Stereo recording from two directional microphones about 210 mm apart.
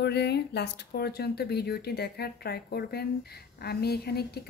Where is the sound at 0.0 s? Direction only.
50° left (ahead or behind).